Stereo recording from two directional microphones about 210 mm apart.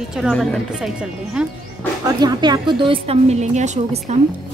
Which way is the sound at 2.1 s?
20° right (ahead or behind).